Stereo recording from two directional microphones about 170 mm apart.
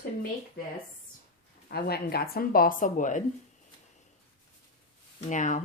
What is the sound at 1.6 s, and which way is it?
Speech, 65° left (ahead or behind).